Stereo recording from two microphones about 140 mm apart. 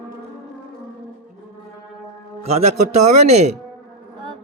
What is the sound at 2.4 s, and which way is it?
A man's voice, 50° right (ahead or behind).